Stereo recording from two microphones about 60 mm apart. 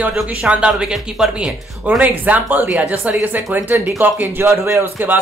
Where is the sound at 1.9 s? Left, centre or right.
Right.